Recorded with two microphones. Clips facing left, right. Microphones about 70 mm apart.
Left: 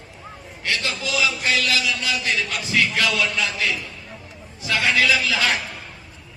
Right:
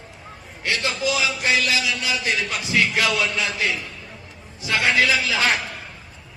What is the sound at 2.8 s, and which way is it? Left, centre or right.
Speech, right.